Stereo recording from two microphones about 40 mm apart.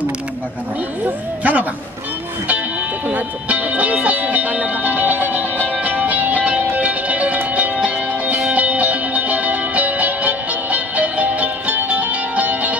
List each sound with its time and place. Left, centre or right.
1.4 s a sound: right
3.1 s music: right
5.0 s music: right